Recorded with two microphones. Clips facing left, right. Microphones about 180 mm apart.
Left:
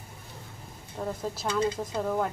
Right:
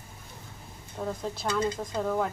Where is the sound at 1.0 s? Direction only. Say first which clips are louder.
Even; 5° left (ahead or behind).